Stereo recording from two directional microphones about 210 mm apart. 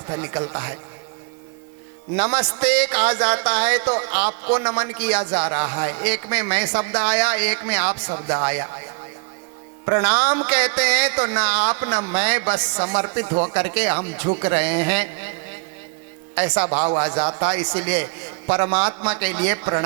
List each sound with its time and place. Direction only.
0.1 s speech: 20° right (ahead or behind)
2.1 s speech: 10° right (ahead or behind)
8.1 s speech: 25° right (ahead or behind)
8.4 s speech: 10° right (ahead or behind)
10.0 s speech: 10° right (ahead or behind)
13.2 s speech: 30° right (ahead or behind)
13.5 s speech: 10° right (ahead or behind)
16.3 s speech: 10° right (ahead or behind)
17.1 s speech: 30° right (ahead or behind)
17.4 s speech: 10° right (ahead or behind)